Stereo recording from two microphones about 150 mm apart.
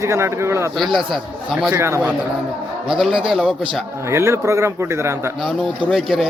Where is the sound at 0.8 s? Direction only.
Centre (ahead or behind).